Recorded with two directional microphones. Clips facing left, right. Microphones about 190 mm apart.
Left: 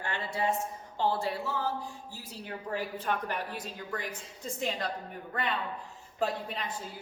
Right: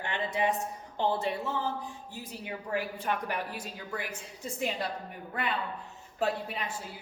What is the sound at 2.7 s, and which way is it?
A woman's voice, 10° right (ahead or behind).